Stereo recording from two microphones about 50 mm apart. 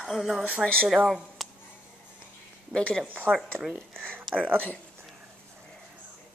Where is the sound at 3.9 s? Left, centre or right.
Right.